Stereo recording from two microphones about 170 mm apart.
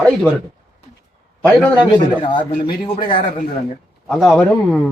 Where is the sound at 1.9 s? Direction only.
25° left (ahead or behind).